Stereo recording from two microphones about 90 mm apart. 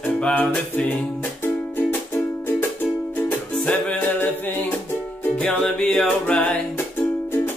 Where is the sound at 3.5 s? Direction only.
10° left (ahead or behind).